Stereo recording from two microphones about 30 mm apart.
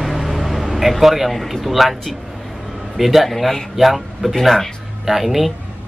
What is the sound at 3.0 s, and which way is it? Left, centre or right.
Speech, centre.